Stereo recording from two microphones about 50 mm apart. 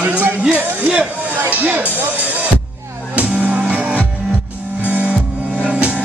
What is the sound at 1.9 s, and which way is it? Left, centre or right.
Music, right.